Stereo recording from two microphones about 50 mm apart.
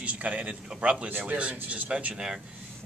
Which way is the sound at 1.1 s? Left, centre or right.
Right.